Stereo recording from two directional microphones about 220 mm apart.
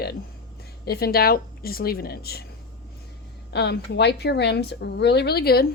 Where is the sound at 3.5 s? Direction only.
50° left (ahead or behind).